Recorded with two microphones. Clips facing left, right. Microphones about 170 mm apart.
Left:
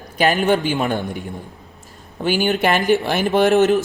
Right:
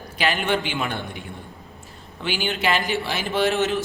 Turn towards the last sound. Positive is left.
turn(degrees=50)  # may be behind; listen again after turning